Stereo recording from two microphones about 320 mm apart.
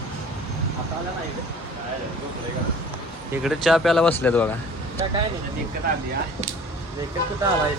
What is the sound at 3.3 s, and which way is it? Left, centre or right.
Speech, centre.